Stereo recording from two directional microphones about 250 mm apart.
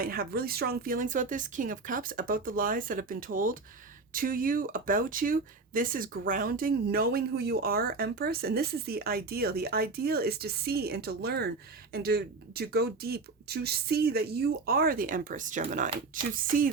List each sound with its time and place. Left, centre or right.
0.0 s speech: right